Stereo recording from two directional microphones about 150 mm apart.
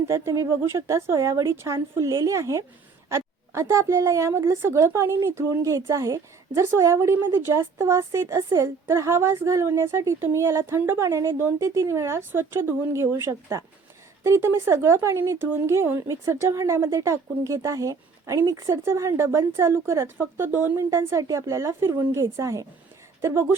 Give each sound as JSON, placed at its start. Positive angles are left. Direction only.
{"t": 0.1, "sound": "a woman's voice", "side_deg": -20}